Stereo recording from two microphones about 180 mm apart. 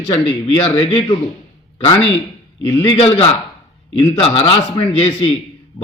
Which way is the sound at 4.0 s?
30° left (ahead or behind).